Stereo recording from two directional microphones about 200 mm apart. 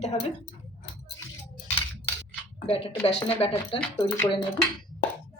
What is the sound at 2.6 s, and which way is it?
Speech, 30° left (ahead or behind).